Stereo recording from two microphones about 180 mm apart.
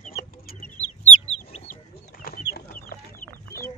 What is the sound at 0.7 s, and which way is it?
Chicken, 40° left (ahead or behind).